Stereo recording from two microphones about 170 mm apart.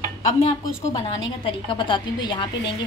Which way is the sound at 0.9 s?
30° left (ahead or behind).